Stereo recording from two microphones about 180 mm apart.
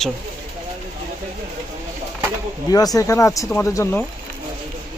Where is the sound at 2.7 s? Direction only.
20° left (ahead or behind).